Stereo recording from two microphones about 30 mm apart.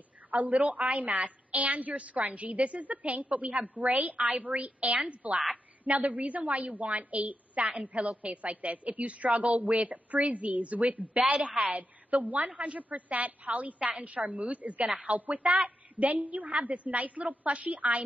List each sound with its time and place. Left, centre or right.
0.3 s a woman's voice: right